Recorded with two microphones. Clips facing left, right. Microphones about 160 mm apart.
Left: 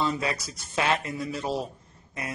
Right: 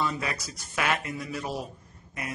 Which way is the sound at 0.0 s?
30° left (ahead or behind).